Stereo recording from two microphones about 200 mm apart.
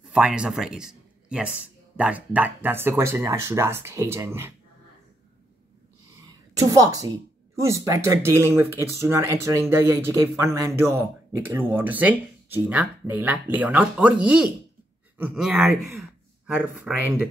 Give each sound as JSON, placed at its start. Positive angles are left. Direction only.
{"t": 0.0, "sound": "speech", "side_deg": -5}
{"t": 6.6, "sound": "speech", "side_deg": -15}
{"t": 16.0, "sound": "a sound", "side_deg": -5}